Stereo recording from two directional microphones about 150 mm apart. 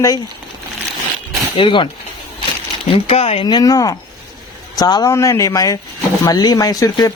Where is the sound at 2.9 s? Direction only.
45° left (ahead or behind).